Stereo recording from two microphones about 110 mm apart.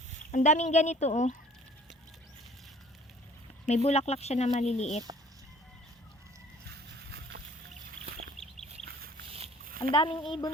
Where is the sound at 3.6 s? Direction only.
75° left (ahead or behind).